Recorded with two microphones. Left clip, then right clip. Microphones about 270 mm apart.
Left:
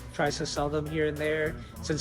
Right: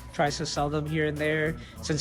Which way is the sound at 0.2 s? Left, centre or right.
Right.